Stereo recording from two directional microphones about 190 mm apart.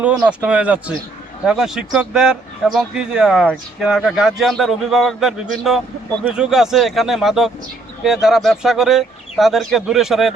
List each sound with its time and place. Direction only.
0.0 s speech: 5° right (ahead or behind)